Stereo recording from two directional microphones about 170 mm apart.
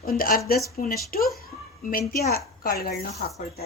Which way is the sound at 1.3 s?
60° left (ahead or behind).